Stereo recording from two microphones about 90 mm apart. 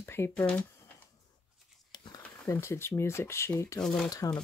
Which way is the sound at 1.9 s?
45° left (ahead or behind).